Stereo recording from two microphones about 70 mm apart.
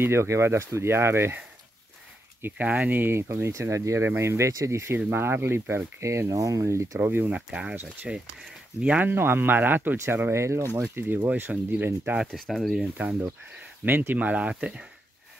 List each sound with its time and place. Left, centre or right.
0.0 s speech: right
2.5 s speech: right
4.5 s speech: right
7.0 s speech: right
7.3 s speech: centre
9.1 s speech: right
12.2 s speech: centre
12.8 s speech: right